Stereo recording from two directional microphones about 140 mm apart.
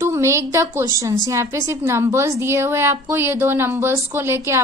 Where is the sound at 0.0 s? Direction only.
20° right (ahead or behind).